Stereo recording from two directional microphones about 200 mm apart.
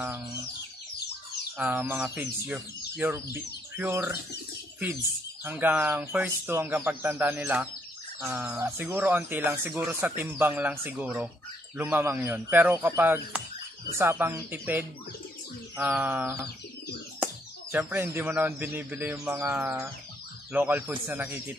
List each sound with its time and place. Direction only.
1.6 s speech: 10° right (ahead or behind)
5.4 s speech: 10° right (ahead or behind)
16.0 s speech: 10° right (ahead or behind)